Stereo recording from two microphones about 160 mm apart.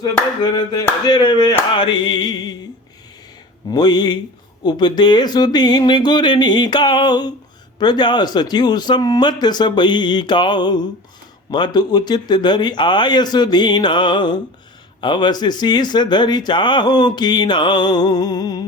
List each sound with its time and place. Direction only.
0.0 s speech: 25° left (ahead or behind)
3.7 s speech: 25° left (ahead or behind)